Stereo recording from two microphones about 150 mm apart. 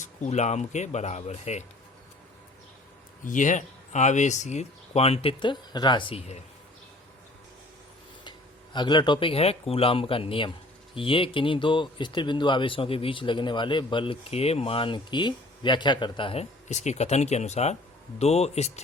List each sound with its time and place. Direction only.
0.0 s speech: 55° left (ahead or behind)
3.2 s speech: 60° left (ahead or behind)
8.2 s speech: 30° left (ahead or behind); by 18.7 s 45° left (ahead or behind)